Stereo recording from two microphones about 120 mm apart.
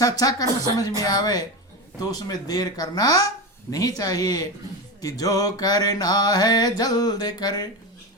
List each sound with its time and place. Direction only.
0.0 s music: 30° left (ahead or behind)
3.7 s speech: 30° left (ahead or behind)
4.9 s music: 30° left (ahead or behind)